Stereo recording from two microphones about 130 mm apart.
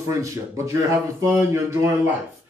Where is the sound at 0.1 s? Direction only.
20° right (ahead or behind).